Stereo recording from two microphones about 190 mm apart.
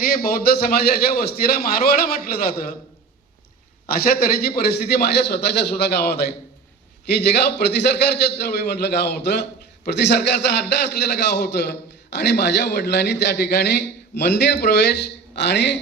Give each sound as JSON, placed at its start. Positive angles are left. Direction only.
{"t": 0.0, "sound": "a man's voice", "side_deg": 50}
{"t": 3.8, "sound": "a man's voice", "side_deg": 50}